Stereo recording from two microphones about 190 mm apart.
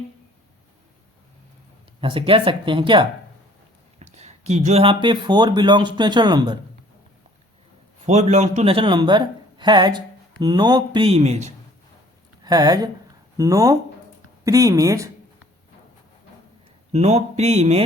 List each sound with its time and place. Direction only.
2.0 s speech: 25° right (ahead or behind)
8.0 s speech: 35° right (ahead or behind)
12.5 s speech: 20° right (ahead or behind)
16.9 s speech: 35° right (ahead or behind)